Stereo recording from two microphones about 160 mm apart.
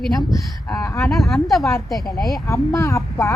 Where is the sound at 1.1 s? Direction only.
Centre (ahead or behind).